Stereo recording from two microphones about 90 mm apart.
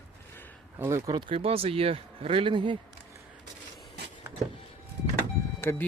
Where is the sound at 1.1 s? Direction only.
75° right (ahead or behind).